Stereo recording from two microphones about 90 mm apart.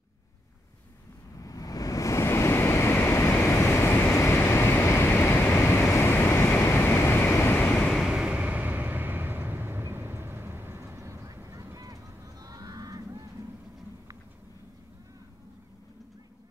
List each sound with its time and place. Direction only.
1.4 s waves: 40° left (ahead or behind); by 7.6 s 25° left (ahead or behind)
7.6 s vehicle: 5° left (ahead or behind); by 13.3 s 40° right (ahead or behind)